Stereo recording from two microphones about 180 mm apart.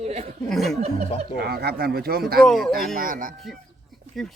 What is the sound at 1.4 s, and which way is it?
Speech, 60° right (ahead or behind).